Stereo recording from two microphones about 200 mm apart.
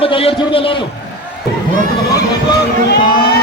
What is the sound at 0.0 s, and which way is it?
Speech, 25° left (ahead or behind).